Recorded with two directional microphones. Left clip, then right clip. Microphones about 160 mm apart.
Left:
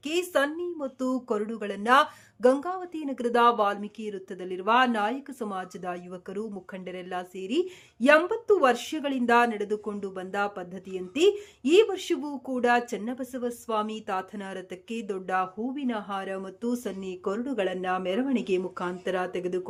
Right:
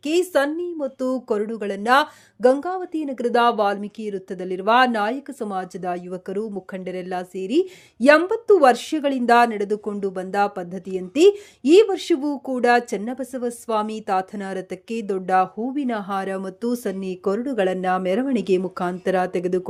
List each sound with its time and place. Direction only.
0.0 s speech: 30° right (ahead or behind)